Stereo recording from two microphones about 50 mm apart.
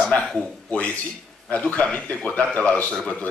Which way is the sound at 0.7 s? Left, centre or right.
Left.